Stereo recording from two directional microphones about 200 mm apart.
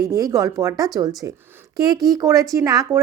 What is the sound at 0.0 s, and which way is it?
A woman's voice, 20° right (ahead or behind).